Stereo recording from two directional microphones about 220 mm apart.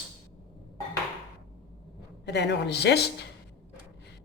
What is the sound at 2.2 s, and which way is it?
A woman's voice, 50° left (ahead or behind).